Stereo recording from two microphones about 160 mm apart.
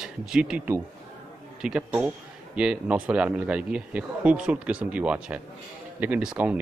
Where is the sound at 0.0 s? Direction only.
5° right (ahead or behind).